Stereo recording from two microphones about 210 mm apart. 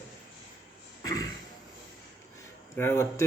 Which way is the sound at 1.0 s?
15° left (ahead or behind).